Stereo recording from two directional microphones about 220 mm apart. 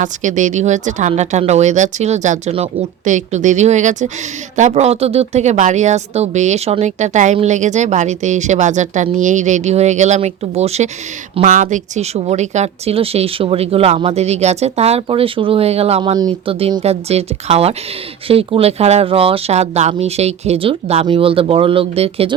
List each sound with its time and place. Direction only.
0.0 s a woman's voice: 35° right (ahead or behind)